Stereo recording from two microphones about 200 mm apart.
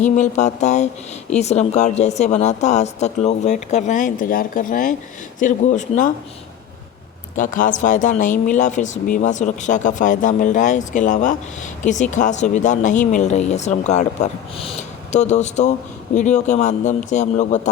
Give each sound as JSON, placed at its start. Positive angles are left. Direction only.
{"t": 0.0, "sound": "speech", "side_deg": 35}
{"t": 7.3, "sound": "speech", "side_deg": 40}